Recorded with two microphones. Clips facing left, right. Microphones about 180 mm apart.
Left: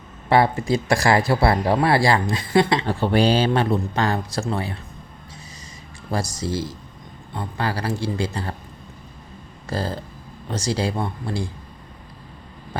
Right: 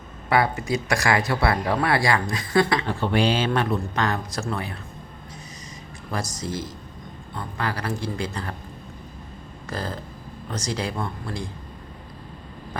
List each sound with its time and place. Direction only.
0.3 s speech: 30° left (ahead or behind)
6.1 s speech: 30° left (ahead or behind)
9.6 s speech: 30° left (ahead or behind)